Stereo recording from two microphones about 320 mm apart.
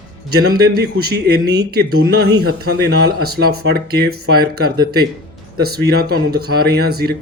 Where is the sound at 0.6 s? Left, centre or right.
Right.